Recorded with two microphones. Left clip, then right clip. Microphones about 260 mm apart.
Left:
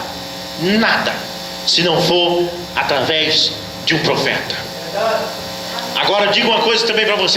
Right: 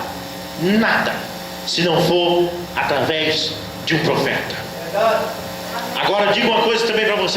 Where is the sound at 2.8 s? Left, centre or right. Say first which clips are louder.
Left 2 dB; centre.